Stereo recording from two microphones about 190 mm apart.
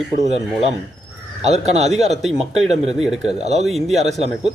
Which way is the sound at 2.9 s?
5° right (ahead or behind).